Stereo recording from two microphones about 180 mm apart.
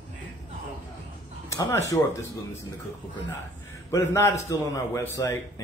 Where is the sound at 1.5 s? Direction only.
15° left (ahead or behind).